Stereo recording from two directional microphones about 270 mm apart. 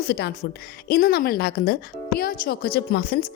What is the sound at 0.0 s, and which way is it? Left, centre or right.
A woman's voice, left.